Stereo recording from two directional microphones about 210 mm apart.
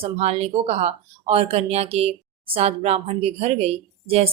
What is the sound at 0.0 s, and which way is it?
Speech, 30° right (ahead or behind).